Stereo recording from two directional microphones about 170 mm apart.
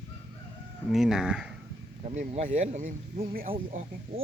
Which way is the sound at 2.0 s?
40° right (ahead or behind).